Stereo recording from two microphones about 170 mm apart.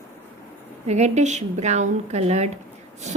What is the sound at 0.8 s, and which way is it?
A woman's voice, 40° right (ahead or behind).